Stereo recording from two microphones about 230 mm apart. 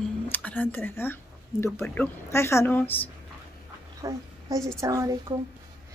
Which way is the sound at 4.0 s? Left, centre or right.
Centre.